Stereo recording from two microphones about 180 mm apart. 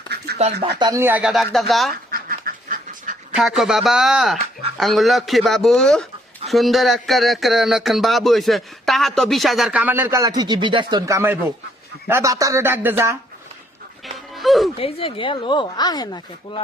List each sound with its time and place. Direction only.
0.8 s speech: 15° right (ahead or behind); by 1.9 s centre (ahead or behind)
2.0 s duck: 55° right (ahead or behind)
3.3 s speech: centre (ahead or behind)
14.3 s speech: centre (ahead or behind)
14.8 s speech: 30° left (ahead or behind)